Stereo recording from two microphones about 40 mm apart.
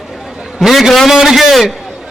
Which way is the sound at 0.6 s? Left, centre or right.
Centre.